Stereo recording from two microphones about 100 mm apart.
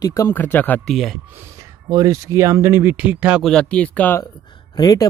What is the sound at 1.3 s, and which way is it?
Speech, 25° right (ahead or behind).